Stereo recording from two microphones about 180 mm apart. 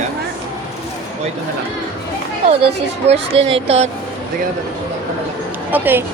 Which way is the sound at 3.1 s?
30° right (ahead or behind).